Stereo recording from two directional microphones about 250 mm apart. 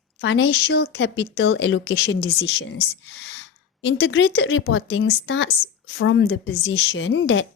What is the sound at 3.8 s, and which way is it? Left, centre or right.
Speech, left.